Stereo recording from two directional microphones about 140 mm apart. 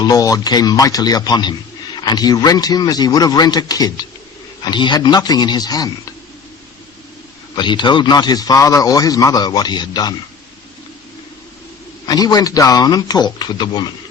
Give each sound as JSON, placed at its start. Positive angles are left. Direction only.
{"t": 0.0, "sound": "a man's voice", "side_deg": 25}
{"t": 7.5, "sound": "a man's voice", "side_deg": 35}
{"t": 12.0, "sound": "a man's voice", "side_deg": 30}